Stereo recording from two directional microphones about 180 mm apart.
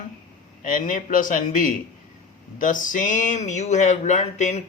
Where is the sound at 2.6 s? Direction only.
45° left (ahead or behind).